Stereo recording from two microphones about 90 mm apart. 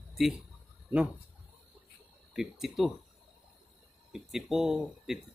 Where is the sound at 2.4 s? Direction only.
Centre (ahead or behind).